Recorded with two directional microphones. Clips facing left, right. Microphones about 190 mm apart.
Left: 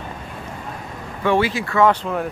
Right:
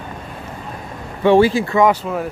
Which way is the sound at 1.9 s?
5° right (ahead or behind).